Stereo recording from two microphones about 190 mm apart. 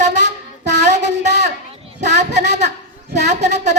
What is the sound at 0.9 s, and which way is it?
Child singing, 40° right (ahead or behind).